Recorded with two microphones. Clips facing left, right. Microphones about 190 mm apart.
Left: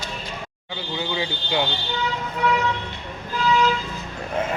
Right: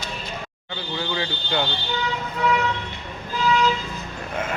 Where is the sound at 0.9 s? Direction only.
15° left (ahead or behind).